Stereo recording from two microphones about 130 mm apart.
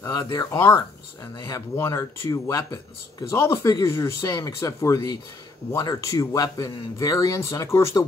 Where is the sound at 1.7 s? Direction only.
20° left (ahead or behind).